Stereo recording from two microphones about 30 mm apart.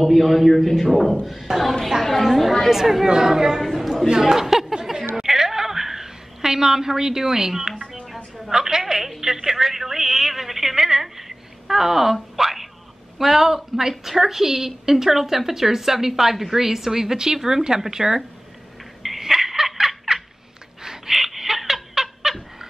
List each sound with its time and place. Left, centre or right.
0.1 s a man's voice: centre
2.7 s a woman's voice: centre
3.6 s a man's voice: centre
4.2 s chatter: centre
5.1 s a sound: centre
8.5 s a woman's voice: right
19.1 s a sound: centre
22.3 s cat: centre